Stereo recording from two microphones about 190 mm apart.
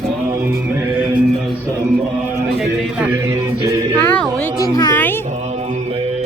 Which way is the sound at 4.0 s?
10° left (ahead or behind).